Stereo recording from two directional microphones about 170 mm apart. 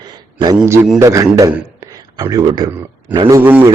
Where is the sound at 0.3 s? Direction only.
20° right (ahead or behind).